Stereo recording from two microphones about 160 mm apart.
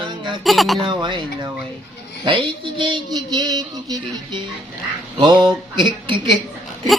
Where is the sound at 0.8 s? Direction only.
30° right (ahead or behind).